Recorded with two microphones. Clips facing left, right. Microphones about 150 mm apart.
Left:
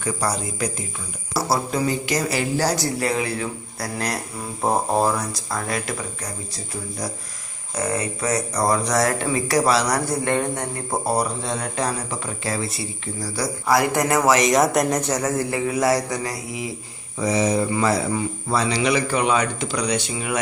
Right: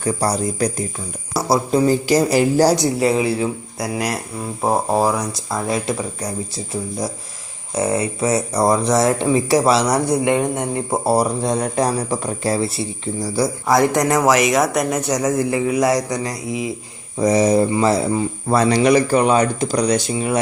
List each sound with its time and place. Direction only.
0.0 s speech: 35° right (ahead or behind)
1.3 s a sound: 20° right (ahead or behind)
1.9 s speech: 35° right (ahead or behind)
2.7 s speech: 25° right (ahead or behind)
3.8 s speech: 10° right (ahead or behind)
5.5 s speech: 20° right (ahead or behind)
7.8 s speech: 30° right (ahead or behind)
11.4 s speech: 35° right (ahead or behind); by 14.5 s 10° right (ahead or behind)
14.5 s speech: centre (ahead or behind); by 16.7 s 20° right (ahead or behind)
17.2 s speech: 40° right (ahead or behind)
17.7 s speech: 25° right (ahead or behind)
18.4 s speech: 50° right (ahead or behind); by 20.4 s 35° right (ahead or behind)